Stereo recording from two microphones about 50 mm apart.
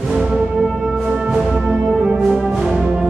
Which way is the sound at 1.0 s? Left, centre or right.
Centre.